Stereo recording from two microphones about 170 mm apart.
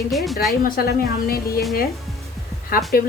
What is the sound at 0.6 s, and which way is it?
A woman's voice, 60° left (ahead or behind).